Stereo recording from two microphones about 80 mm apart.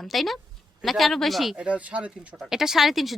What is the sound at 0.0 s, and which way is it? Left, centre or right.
A woman's voice, centre.